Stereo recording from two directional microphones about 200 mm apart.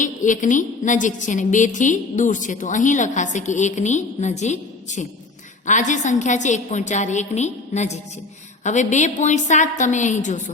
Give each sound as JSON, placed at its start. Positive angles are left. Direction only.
{"t": 0.0, "sound": "a woman's voice", "side_deg": 40}